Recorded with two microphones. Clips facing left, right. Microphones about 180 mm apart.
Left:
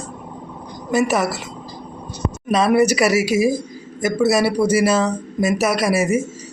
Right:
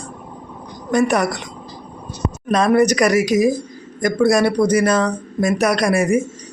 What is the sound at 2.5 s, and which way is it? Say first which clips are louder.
A woman's voice: right 1 dB; 5° left (ahead or behind).